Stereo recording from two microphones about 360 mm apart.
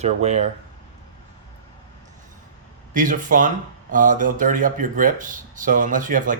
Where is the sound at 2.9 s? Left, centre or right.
Right.